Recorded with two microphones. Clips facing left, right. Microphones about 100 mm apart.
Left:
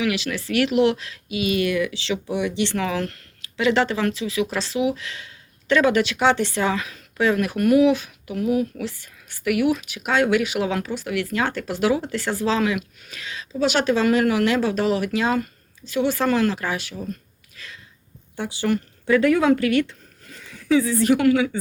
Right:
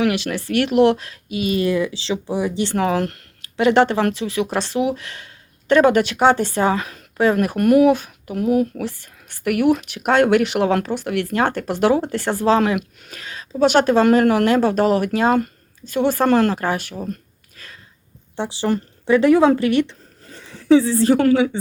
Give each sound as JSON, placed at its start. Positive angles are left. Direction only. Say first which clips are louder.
{"t": 0.0, "sound": "speech", "louder": "right 4 dB", "side_deg": -50}
{"t": 17.6, "sound": "a sound", "louder": "left 1 dB", "side_deg": -45}
{"t": 18.3, "sound": "speech", "louder": "right 2 dB", "side_deg": -30}